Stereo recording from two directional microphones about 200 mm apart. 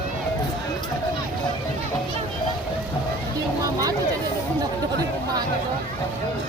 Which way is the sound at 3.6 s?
20° right (ahead or behind).